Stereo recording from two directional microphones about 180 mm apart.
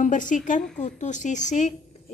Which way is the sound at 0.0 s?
45° left (ahead or behind).